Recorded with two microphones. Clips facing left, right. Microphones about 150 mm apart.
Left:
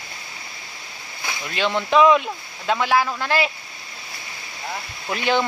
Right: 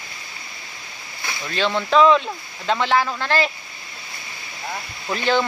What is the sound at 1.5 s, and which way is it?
Speech, 15° left (ahead or behind).